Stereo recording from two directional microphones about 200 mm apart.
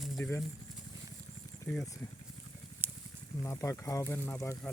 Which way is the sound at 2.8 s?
10° right (ahead or behind).